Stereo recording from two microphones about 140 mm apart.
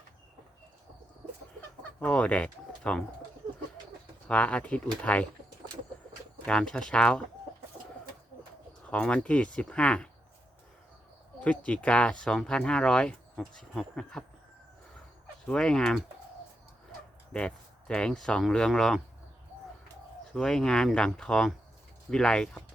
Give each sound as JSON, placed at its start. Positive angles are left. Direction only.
{"t": 2.0, "sound": "speech", "side_deg": 10}
{"t": 4.3, "sound": "speech", "side_deg": 10}
{"t": 6.4, "sound": "speech", "side_deg": 5}
{"t": 8.9, "sound": "speech", "side_deg": 10}
{"t": 11.6, "sound": "speech", "side_deg": 10}
{"t": 15.4, "sound": "speech", "side_deg": 5}
{"t": 17.3, "sound": "speech", "side_deg": 5}
{"t": 20.3, "sound": "speech", "side_deg": 5}